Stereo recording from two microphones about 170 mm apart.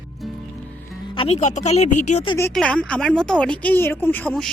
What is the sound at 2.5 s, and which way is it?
A woman's voice, 5° left (ahead or behind).